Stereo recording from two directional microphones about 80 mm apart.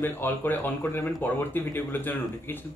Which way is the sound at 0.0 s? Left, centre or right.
Left.